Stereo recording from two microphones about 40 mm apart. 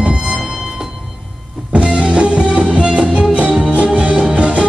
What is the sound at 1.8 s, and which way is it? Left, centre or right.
Music, right.